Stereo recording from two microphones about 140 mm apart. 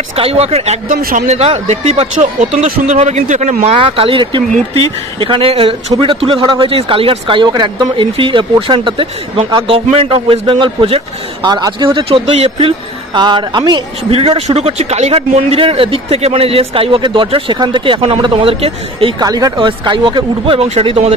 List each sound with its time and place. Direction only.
0.1 s speech: 45° right (ahead or behind)
0.8 s speech: 80° right
1.2 s speech: 50° right (ahead or behind)
3.6 s speech: 40° right (ahead or behind)
19.1 s speech: 25° right (ahead or behind); by 21.1 s 45° right (ahead or behind)